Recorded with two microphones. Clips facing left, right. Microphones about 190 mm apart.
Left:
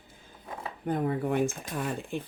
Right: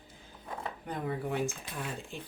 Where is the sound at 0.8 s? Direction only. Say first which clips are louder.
Left 8 dB; 50° left (ahead or behind).